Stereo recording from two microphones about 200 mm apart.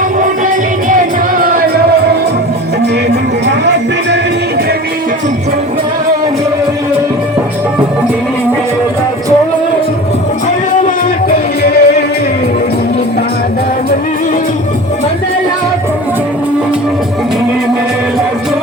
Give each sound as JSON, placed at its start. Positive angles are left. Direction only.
{"t": 0.4, "sound": "music", "side_deg": -40}
{"t": 10.8, "sound": "music", "side_deg": 50}